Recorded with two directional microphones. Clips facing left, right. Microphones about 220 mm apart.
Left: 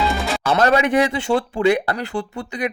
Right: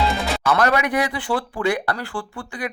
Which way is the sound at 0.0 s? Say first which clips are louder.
Left 1 dB; centre (ahead or behind).